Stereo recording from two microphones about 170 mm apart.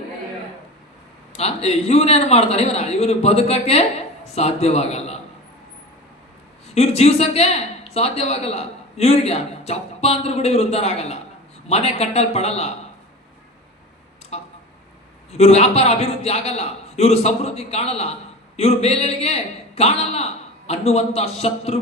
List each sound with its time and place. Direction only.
1.3 s a man's voice: 40° left (ahead or behind)
6.7 s a man's voice: 40° left (ahead or behind)
14.3 s a sound: 40° left (ahead or behind)
15.3 s a man's voice: 40° left (ahead or behind)